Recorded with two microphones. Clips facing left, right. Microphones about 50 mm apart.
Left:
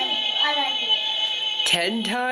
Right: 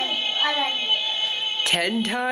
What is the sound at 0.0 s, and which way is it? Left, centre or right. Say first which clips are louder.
A woman's voice: left 1 dB; centre.